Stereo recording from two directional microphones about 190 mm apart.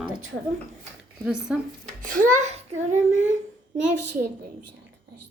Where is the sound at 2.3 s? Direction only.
40° right (ahead or behind).